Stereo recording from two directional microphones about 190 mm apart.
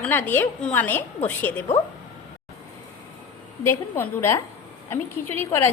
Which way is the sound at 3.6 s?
10° left (ahead or behind).